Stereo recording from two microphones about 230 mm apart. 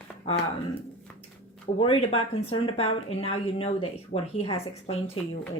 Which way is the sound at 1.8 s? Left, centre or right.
Left.